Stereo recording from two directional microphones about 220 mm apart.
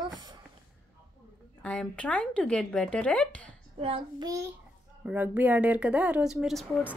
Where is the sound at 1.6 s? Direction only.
5° left (ahead or behind).